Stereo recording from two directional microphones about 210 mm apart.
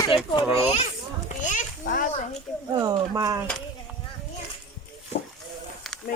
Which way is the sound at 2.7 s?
15° right (ahead or behind).